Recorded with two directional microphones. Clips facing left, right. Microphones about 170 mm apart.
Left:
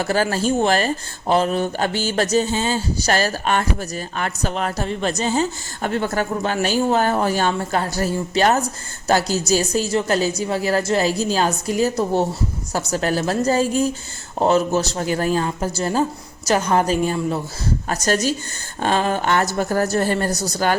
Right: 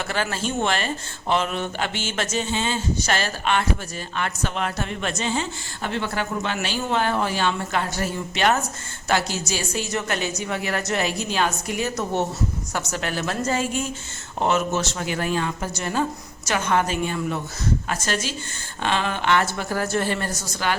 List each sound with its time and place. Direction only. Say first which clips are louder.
0.0 s speech: left 7 dB; 40° left (ahead or behind)